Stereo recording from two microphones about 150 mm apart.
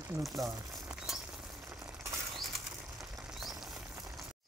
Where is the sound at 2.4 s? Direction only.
Centre (ahead or behind).